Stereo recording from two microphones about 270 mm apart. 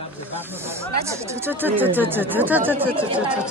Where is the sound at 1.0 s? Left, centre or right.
Centre.